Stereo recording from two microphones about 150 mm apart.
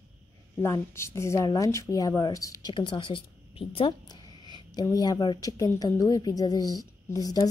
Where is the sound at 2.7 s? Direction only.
35° left (ahead or behind).